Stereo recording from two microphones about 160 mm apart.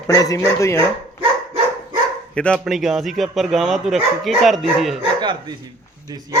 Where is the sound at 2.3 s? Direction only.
5° left (ahead or behind).